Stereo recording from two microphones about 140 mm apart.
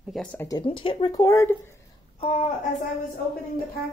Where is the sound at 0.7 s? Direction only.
40° left (ahead or behind).